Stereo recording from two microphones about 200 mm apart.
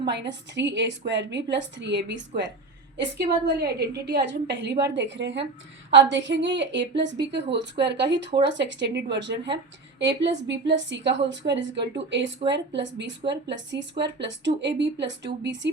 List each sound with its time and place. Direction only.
0.1 s a woman's voice: 60° right (ahead or behind)